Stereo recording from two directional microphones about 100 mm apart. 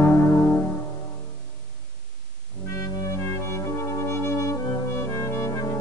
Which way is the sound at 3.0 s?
30° left (ahead or behind).